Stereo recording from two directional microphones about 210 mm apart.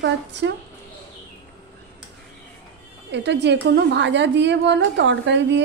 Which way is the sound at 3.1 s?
55° right (ahead or behind).